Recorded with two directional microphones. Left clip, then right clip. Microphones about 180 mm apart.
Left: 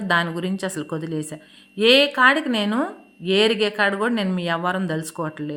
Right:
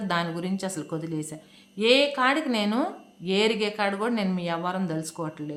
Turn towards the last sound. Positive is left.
turn(degrees=25)  # may be behind; listen again after turning